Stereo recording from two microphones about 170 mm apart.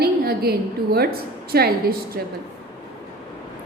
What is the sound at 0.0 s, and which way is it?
A woman's voice, 65° right (ahead or behind).